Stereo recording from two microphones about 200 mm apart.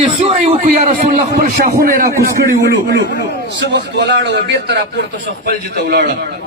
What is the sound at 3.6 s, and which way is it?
A man's voice, 55° right (ahead or behind).